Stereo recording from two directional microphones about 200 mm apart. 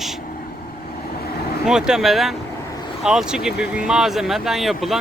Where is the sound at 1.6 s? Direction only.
5° right (ahead or behind).